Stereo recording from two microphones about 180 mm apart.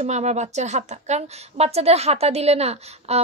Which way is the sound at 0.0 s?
40° right (ahead or behind).